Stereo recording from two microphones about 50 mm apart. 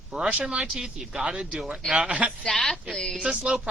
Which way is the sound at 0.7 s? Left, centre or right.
Centre.